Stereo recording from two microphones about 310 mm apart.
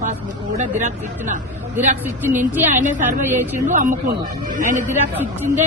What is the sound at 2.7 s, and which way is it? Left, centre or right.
Speech, right.